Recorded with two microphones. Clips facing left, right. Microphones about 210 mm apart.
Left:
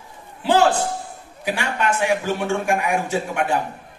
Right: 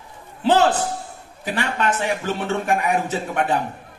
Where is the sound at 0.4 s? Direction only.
10° left (ahead or behind).